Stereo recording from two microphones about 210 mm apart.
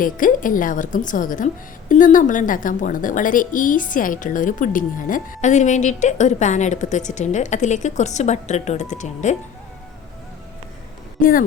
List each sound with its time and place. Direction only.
0.0 s a woman's voice: 40° left (ahead or behind)
11.2 s a woman's voice: 40° left (ahead or behind)